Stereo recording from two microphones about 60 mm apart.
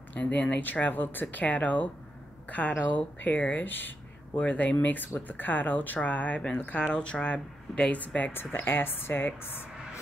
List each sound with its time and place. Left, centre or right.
0.1 s speech: left
8.5 s speech: left